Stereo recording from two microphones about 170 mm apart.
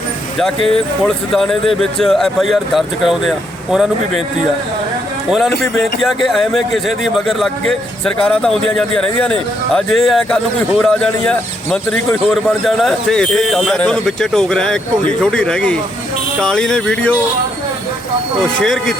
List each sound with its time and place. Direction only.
1.0 s a man's voice: 5° left (ahead or behind)
5.3 s a man's voice: centre (ahead or behind)
18.6 s a man's voice: centre (ahead or behind)